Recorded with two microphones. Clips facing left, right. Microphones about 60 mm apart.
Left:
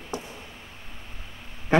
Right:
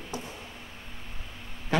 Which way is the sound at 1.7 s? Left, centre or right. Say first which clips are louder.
Left 6 dB; left.